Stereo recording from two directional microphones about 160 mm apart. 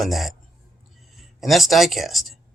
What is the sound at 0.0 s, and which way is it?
A man's voice, centre (ahead or behind).